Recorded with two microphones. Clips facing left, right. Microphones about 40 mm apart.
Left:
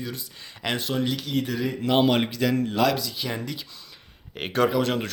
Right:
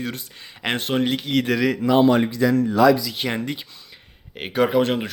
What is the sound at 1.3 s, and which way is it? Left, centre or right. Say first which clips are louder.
Speech: right 6 dB; right.